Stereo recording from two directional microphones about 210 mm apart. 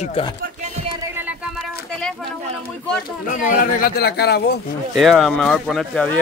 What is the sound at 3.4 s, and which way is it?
Speech, 45° left (ahead or behind).